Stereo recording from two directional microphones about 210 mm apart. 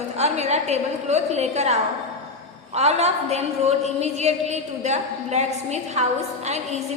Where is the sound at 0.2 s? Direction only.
30° right (ahead or behind).